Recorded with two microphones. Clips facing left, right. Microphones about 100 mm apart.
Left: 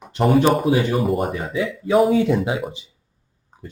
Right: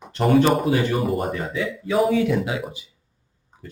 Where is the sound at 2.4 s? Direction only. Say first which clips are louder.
Left 3 dB; 25° left (ahead or behind).